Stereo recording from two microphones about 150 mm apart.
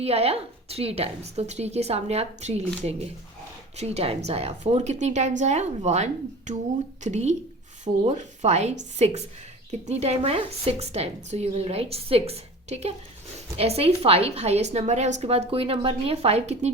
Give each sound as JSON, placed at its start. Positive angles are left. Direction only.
{"t": 0.0, "sound": "a woman's voice", "side_deg": -40}
{"t": 3.8, "sound": "a woman's voice", "side_deg": -45}